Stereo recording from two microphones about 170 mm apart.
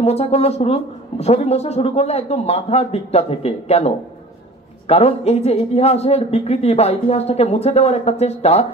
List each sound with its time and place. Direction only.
0.0 s speech: 40° left (ahead or behind)